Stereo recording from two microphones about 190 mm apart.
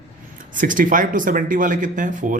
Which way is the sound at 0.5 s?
45° right (ahead or behind).